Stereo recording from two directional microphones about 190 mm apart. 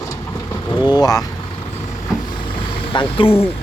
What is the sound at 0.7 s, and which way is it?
Speech, 20° left (ahead or behind).